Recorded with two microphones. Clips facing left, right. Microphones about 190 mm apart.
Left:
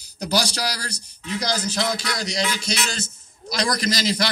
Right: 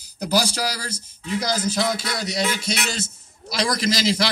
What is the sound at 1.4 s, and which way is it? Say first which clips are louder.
A man's voice: right 1 dB; 10° right (ahead or behind).